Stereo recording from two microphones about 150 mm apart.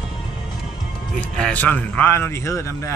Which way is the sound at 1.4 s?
5° left (ahead or behind).